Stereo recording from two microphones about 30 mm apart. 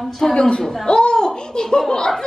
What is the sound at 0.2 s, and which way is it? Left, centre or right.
Speech, left.